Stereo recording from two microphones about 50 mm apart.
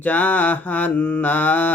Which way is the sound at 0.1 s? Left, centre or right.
Left.